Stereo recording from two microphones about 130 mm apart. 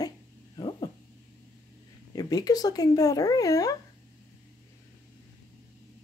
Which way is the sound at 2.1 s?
30° left (ahead or behind).